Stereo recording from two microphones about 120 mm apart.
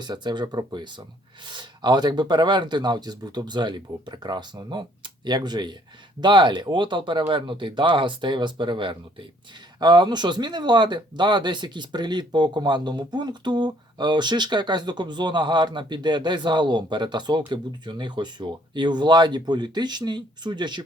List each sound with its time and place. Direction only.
0.0 s speech: 40° right (ahead or behind)